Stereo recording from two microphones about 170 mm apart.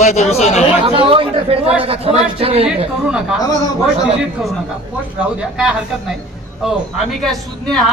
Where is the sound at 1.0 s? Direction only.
30° right (ahead or behind).